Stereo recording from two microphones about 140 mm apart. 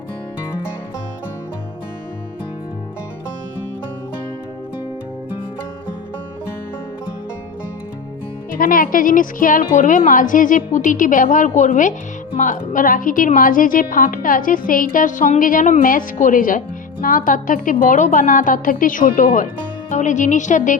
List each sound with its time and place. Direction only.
8.5 s a woman's voice: 90° left; by 19.5 s 70° left (ahead or behind)
19.9 s a woman's voice: 60° left (ahead or behind)